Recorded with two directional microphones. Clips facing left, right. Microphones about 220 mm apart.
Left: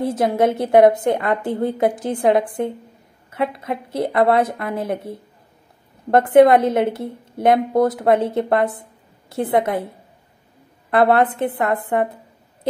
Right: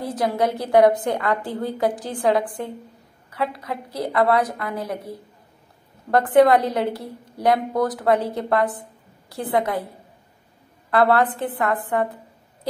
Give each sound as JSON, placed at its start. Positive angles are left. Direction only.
{"t": 0.0, "sound": "a woman's voice", "side_deg": 25}
{"t": 10.9, "sound": "a woman's voice", "side_deg": 20}